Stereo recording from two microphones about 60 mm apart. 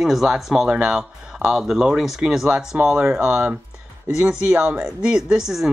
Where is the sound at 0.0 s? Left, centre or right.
Centre.